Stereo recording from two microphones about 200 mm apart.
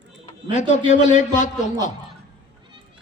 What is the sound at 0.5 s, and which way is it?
Speech, 35° left (ahead or behind).